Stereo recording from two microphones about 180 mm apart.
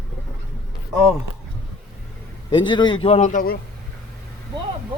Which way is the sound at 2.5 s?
25° left (ahead or behind).